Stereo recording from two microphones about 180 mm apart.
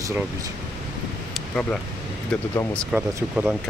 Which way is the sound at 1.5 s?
5° left (ahead or behind).